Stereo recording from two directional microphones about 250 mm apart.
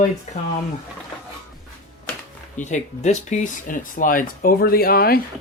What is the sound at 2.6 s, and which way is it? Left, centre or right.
Speech, left.